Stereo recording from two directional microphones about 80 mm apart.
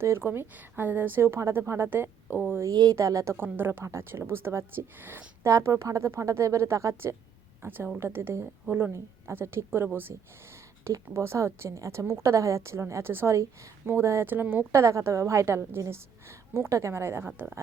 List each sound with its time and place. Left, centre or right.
0.0 s speech: right
2.6 s speech: right
2.9 s a woman's voice: right
3.3 s speech: right
5.4 s a woman's voice: right
7.6 s a woman's voice: right
14.7 s a woman's voice: right